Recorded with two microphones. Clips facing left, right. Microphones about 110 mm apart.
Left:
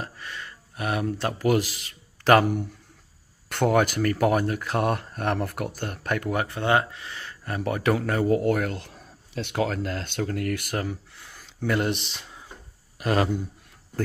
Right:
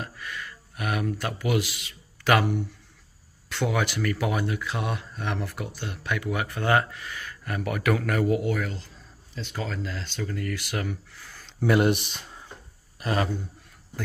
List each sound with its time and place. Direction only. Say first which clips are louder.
0.0 s speech: even; 30° left (ahead or behind)
3.4 s speech: left 5 dB; 50° left (ahead or behind)
6.4 s speech: right 1 dB; 25° left (ahead or behind); by 10.8 s 50° left (ahead or behind)
10.8 s speech: left 1 dB; 30° left (ahead or behind)
11.6 s speech: right 4 dB; 10° right (ahead or behind)
13.0 s a man's voice: left 3 dB; 40° left (ahead or behind)